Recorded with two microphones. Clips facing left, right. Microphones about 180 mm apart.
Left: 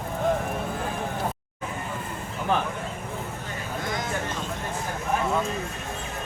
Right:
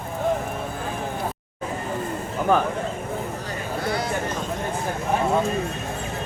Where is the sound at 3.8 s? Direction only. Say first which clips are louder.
Right 5 dB; 35° right (ahead or behind).